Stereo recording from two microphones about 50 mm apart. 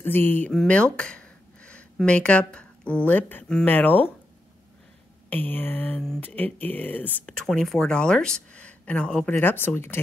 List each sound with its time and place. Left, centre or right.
0.0 s speech: left
0.7 s a sound: left
2.0 s speech: left
5.3 s speech: left
7.2 s speech: centre
8.5 s a sound: left
9.1 s speech: centre
9.4 s speech: left